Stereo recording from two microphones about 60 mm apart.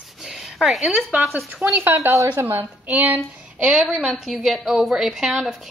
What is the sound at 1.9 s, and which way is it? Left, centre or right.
Speech, right.